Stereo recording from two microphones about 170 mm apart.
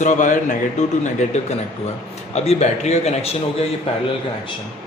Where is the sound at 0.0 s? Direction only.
45° left (ahead or behind).